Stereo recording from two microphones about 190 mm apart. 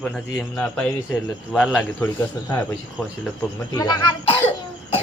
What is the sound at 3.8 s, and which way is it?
Speech, 20° left (ahead or behind).